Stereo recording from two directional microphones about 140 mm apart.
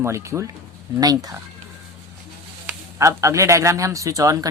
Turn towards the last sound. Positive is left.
turn(degrees=-25)  # may be behind; listen again after turning